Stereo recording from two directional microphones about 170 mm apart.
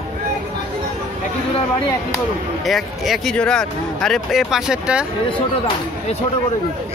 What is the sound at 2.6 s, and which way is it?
Speech, centre (ahead or behind).